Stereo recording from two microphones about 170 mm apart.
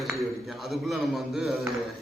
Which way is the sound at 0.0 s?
Centre (ahead or behind).